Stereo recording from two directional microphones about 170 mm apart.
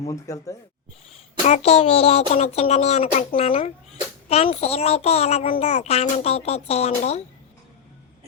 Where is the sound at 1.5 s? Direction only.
40° left (ahead or behind).